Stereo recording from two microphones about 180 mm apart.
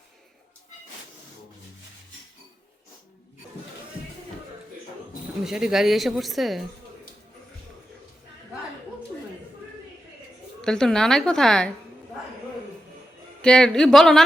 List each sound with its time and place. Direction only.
5.5 s speech: 5° right (ahead or behind)
10.6 s speech: 5° left (ahead or behind)
13.4 s speech: 5° left (ahead or behind)